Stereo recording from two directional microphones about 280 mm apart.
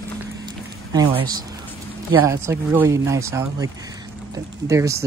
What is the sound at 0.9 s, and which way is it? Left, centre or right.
Speech, centre.